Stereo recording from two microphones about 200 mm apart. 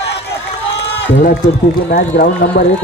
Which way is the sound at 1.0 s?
60° left (ahead or behind).